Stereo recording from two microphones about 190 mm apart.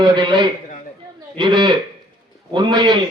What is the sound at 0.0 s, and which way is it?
A man's voice, 25° right (ahead or behind).